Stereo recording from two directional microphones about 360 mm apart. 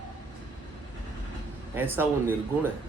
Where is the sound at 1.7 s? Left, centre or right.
Centre.